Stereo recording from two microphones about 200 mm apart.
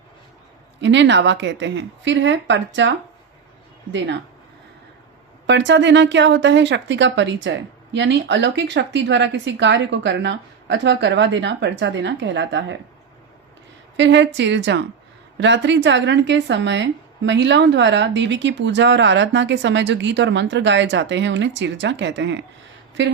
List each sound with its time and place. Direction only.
0.8 s speech: 65° right (ahead or behind)
3.9 s speech: 65° right (ahead or behind)
5.5 s speech: 65° right (ahead or behind)
13.9 s speech: 65° right (ahead or behind)